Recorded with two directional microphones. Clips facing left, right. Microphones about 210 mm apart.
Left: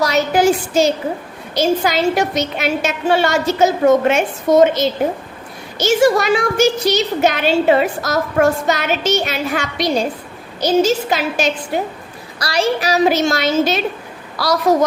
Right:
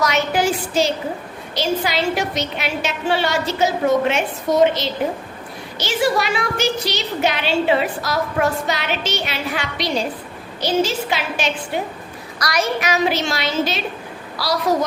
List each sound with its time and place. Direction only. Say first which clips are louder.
0.0 s a sound: left 5 dB; 40° left (ahead or behind)
1.5 s a woman's voice: left 5 dB; 45° left (ahead or behind)
12.4 s a woman's voice: left 3 dB; 30° left (ahead or behind); by 14.8 s 50° left (ahead or behind)